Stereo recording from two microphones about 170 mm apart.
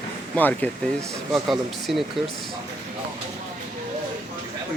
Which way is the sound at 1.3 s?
Centre (ahead or behind).